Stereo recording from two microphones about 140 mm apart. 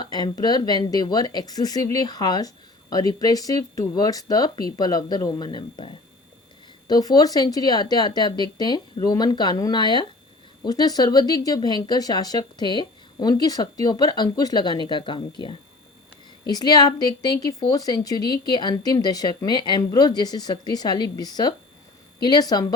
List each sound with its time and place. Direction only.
0.0 s speech: 30° left (ahead or behind)
16.4 s speech: 30° left (ahead or behind)